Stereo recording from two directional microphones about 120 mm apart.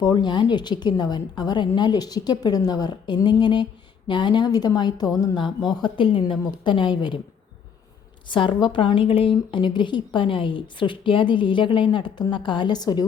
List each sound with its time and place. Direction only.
0.0 s a woman's voice: 40° left (ahead or behind)
8.3 s speech: 45° left (ahead or behind)